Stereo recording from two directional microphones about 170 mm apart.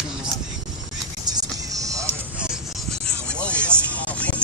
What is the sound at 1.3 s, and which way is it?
Vehicle, 20° right (ahead or behind).